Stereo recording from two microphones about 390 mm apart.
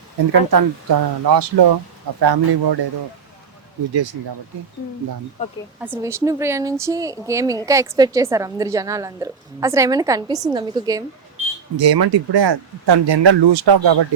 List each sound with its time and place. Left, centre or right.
0.3 s speech: right
2.2 s speech: right
5.4 s speech: centre
5.8 s a woman's voice: centre
11.8 s speech: right